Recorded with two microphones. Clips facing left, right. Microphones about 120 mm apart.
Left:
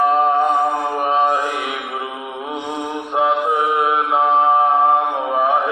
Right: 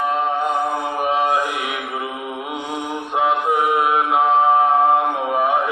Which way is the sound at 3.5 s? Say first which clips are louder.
Even; 25° left (ahead or behind).